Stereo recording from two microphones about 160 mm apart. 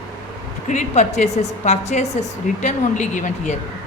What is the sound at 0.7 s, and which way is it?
Speech, 50° left (ahead or behind).